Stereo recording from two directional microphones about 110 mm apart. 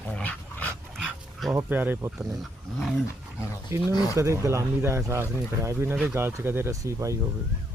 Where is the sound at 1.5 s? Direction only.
20° right (ahead or behind).